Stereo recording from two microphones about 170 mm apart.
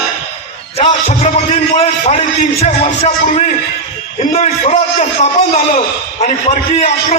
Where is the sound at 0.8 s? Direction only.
35° left (ahead or behind).